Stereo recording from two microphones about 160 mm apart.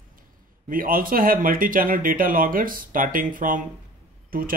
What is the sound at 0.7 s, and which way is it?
Speech, 60° right (ahead or behind).